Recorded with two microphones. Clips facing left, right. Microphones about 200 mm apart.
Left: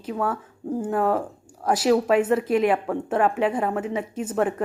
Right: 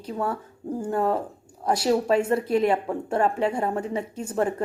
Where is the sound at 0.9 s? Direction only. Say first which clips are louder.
Left 1 dB; 25° right (ahead or behind).